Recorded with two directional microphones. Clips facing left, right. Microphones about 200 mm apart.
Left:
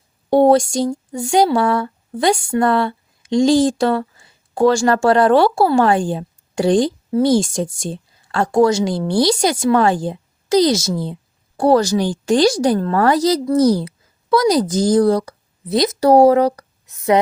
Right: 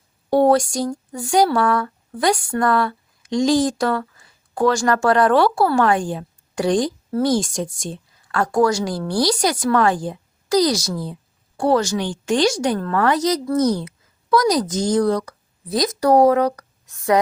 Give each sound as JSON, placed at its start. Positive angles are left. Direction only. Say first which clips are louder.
{"t": 0.3, "sound": "a woman's voice", "louder": "left 3 dB", "side_deg": 25}